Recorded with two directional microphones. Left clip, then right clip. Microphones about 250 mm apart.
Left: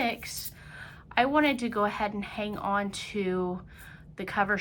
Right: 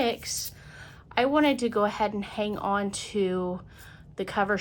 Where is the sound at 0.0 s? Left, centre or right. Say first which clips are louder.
Right 3 dB; centre.